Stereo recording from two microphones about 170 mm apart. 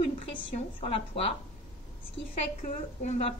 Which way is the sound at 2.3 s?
45° left (ahead or behind).